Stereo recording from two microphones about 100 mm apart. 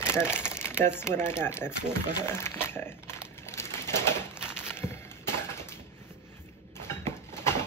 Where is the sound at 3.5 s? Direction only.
25° left (ahead or behind).